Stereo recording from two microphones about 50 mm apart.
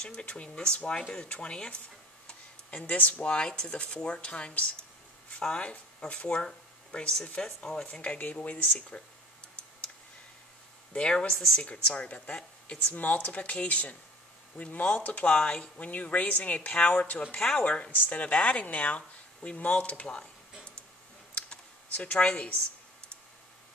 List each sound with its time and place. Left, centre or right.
0.0 s speech: left
2.8 s speech: left
8.2 s speech: left
8.7 s a sound: centre
10.9 s speech: centre
11.3 s speech: centre
11.6 s speech: centre
12.3 s a sound: centre
12.9 s speech: left
21.9 s speech: left